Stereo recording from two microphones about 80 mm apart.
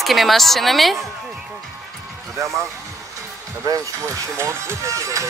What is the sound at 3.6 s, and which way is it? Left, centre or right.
Speech, right.